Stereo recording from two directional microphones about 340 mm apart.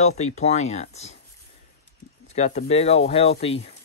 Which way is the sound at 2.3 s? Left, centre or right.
Centre.